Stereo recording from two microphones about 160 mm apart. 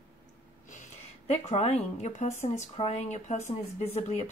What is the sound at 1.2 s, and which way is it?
Speech, 40° left (ahead or behind).